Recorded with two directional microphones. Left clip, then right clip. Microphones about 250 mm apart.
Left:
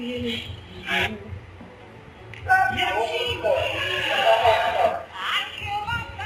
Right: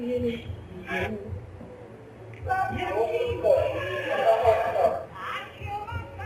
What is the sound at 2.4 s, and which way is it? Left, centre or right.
Music, centre.